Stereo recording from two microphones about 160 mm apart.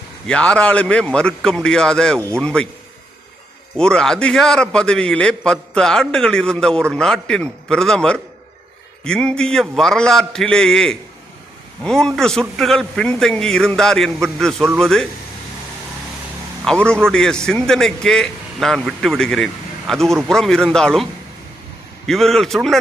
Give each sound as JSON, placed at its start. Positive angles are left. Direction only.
{"t": 0.3, "sound": "a man's voice", "side_deg": 5}
{"t": 3.8, "sound": "a man's voice", "side_deg": 5}
{"t": 16.6, "sound": "a man's voice", "side_deg": 5}